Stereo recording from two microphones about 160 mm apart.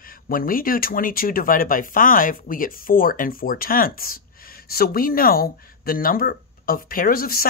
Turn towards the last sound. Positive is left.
turn(degrees=65)  # may be behind; listen again after turning